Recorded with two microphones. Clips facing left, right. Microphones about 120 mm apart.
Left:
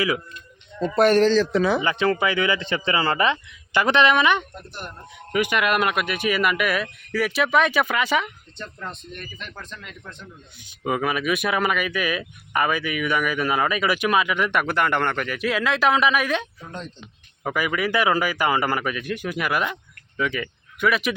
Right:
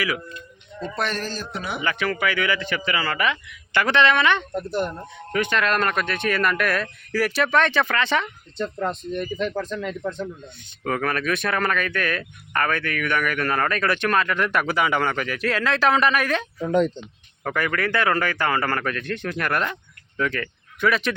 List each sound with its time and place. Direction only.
0.8 s a man's voice: 45° left (ahead or behind)
1.2 s speech: 90° left
1.8 s speech: 20° left (ahead or behind); by 8.3 s 5° left (ahead or behind)
8.6 s speech: 90° right
10.8 s speech: 10° left (ahead or behind)
16.6 s speech: 90° right
17.4 s speech: 10° left (ahead or behind)